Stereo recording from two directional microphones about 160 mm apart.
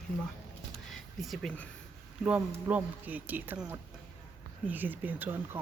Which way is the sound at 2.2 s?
10° right (ahead or behind).